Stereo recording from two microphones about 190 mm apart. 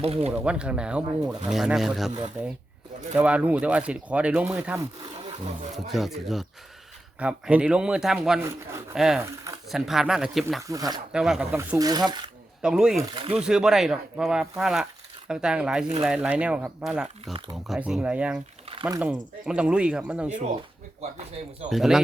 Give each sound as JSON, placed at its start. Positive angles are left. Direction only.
{"t": 0.0, "sound": "speech", "side_deg": -30}
{"t": 0.3, "sound": "speech", "side_deg": -5}
{"t": 3.2, "sound": "speech", "side_deg": -10}
{"t": 10.7, "sound": "speech", "side_deg": -20}
{"t": 11.1, "sound": "speech", "side_deg": -5}
{"t": 11.5, "sound": "speech", "side_deg": -15}
{"t": 12.6, "sound": "speech", "side_deg": -5}
{"t": 18.7, "sound": "speech", "side_deg": -20}
{"t": 19.5, "sound": "speech", "side_deg": -5}
{"t": 21.7, "sound": "speech", "side_deg": 0}